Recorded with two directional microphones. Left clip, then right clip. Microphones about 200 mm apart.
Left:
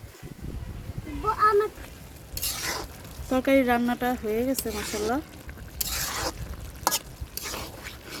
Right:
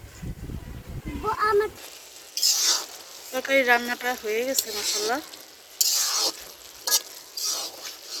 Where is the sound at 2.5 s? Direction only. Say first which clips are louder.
Right 6 dB; 15° left (ahead or behind).